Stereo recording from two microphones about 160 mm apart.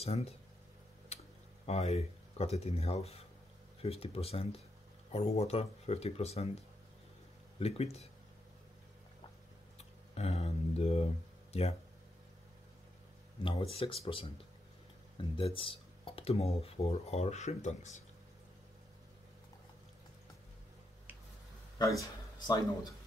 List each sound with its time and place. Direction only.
0.0 s speech: 40° left (ahead or behind)
1.1 s tick-tock: 40° left (ahead or behind)
1.7 s speech: 40° left (ahead or behind)
7.5 s speech: 40° left (ahead or behind)
9.8 s a sound: 40° left (ahead or behind)
13.4 s speech: 35° left (ahead or behind); by 18.0 s 50° left (ahead or behind)
21.8 s a man's voice: 25° left (ahead or behind)